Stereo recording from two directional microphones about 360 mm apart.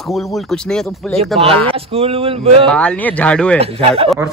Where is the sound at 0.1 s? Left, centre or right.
Centre.